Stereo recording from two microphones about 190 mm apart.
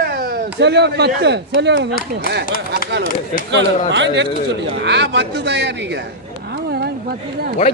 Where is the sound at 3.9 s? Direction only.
70° right (ahead or behind).